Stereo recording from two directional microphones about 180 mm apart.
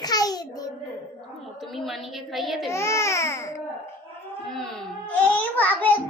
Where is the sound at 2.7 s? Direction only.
15° left (ahead or behind).